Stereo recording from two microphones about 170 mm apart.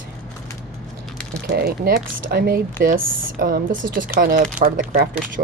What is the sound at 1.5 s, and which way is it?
Speech, 65° right (ahead or behind).